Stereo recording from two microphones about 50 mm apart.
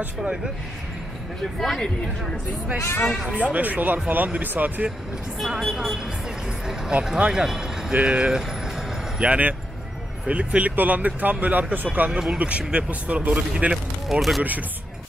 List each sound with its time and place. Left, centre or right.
1.6 s speech: centre
2.8 s speech: left
3.4 s speech: right
5.4 s speech: centre
6.9 s speech: right
7.9 s speech: right
12.1 s speech: centre
12.4 s speech: right
14.0 s speech: centre